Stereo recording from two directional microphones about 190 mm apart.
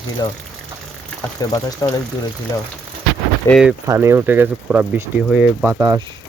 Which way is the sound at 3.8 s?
15° right (ahead or behind).